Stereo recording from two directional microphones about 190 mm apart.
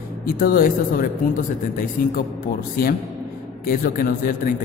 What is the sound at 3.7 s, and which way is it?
Speech, 55° left (ahead or behind).